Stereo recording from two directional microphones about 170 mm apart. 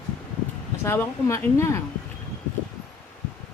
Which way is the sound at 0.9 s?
15° left (ahead or behind).